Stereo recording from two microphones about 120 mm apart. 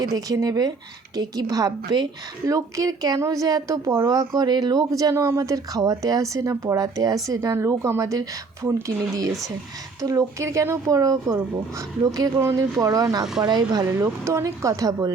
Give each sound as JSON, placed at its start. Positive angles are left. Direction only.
{"t": 0.0, "sound": "a woman's voice", "side_deg": -30}
{"t": 4.4, "sound": "speech", "side_deg": -35}
{"t": 10.0, "sound": "a woman's voice", "side_deg": -30}
{"t": 13.8, "sound": "speech", "side_deg": -25}